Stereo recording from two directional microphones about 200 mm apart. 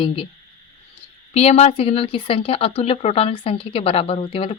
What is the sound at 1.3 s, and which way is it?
Speech, 30° left (ahead or behind).